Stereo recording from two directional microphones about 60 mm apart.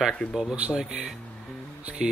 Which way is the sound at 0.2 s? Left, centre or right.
Left.